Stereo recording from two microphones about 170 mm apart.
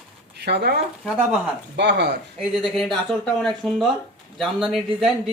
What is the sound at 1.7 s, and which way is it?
Speech, 90° right.